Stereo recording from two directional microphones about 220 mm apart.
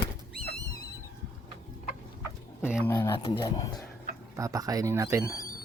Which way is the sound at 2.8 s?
10° left (ahead or behind).